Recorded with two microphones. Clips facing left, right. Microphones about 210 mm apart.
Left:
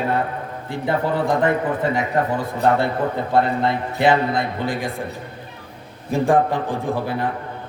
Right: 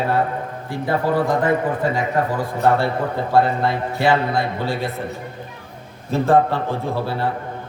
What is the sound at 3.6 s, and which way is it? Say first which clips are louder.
A man's voice: left 1 dB; 20° left (ahead or behind).